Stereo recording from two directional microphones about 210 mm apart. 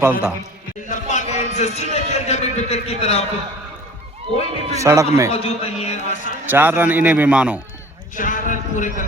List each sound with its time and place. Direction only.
0.0 s a man's voice: 5° right (ahead or behind)
0.9 s a man's voice: 35° left (ahead or behind)
4.7 s a man's voice: 15° right (ahead or behind)
5.3 s a man's voice: 30° left (ahead or behind)
6.4 s a man's voice: 10° right (ahead or behind)
8.1 s speech: 40° left (ahead or behind)